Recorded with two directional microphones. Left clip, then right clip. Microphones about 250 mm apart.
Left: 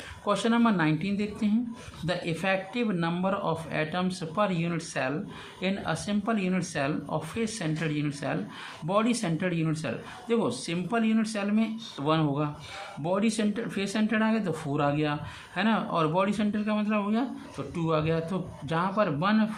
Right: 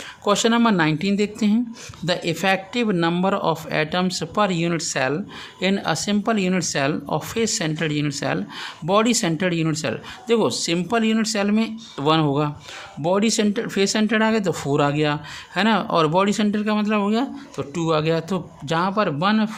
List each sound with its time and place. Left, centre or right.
0.3 s speech: right